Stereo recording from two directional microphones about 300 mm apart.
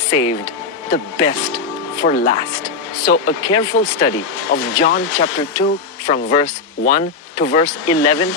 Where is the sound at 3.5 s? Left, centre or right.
Centre.